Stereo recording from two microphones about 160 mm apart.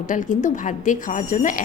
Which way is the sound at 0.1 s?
55° left (ahead or behind).